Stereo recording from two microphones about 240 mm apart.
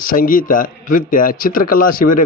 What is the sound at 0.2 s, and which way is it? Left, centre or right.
A man's voice, left.